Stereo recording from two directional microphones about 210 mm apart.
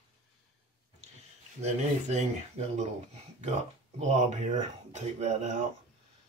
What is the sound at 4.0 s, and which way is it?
Speech, 35° right (ahead or behind).